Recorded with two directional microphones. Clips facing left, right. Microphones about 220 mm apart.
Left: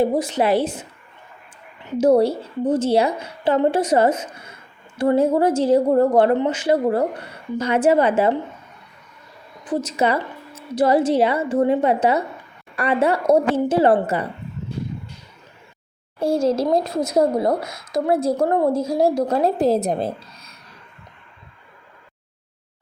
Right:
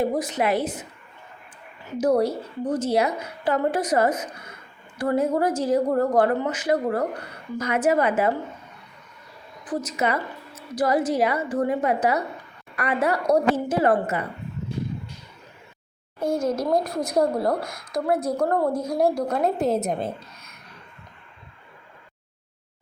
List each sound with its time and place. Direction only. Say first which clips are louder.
0.0 s a woman's voice: left 4 dB; 30° left (ahead or behind)
2.0 s a woman's voice: left 5 dB; 25° left (ahead or behind)
9.6 s a woman's voice: left 5 dB; 30° left (ahead or behind)
16.2 s a woman's voice: left 5 dB; 30° left (ahead or behind)